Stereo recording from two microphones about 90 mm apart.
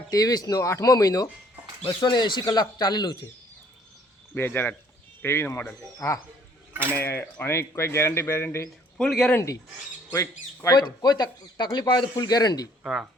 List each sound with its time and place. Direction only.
0.1 s speech: 45° left (ahead or behind)
1.8 s speech: 60° left (ahead or behind)
4.4 s speech: 25° left (ahead or behind)
6.9 s speech: 25° left (ahead or behind)
9.0 s speech: 5° left (ahead or behind)
10.1 s speech: 35° left (ahead or behind)
12.8 s speech: 5° right (ahead or behind)